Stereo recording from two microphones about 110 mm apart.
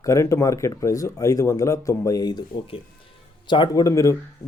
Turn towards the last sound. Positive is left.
turn(degrees=30)  # may be behind; listen again after turning